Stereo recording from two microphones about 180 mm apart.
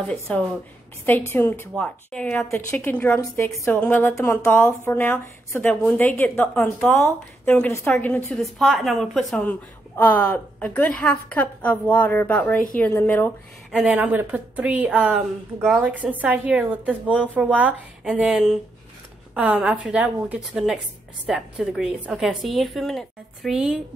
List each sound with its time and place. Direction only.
0.0 s a woman's voice: 5° left (ahead or behind)
13.7 s a woman's voice: 5° right (ahead or behind)
15.6 s a woman's voice: 5° left (ahead or behind)
15.9 s a woman's voice: 10° right (ahead or behind)